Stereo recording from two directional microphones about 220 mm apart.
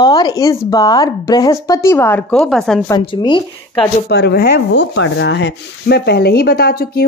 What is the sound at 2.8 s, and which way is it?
Speech, 20° left (ahead or behind).